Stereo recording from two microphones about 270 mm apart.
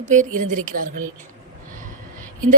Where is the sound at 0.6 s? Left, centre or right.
Right.